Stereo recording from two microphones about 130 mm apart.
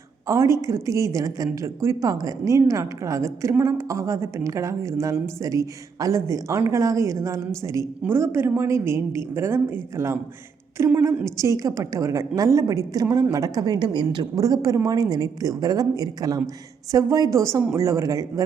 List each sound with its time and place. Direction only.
0.3 s a woman's voice: 25° right (ahead or behind)